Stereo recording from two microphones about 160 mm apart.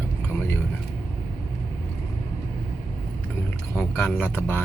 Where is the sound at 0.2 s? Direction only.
15° left (ahead or behind).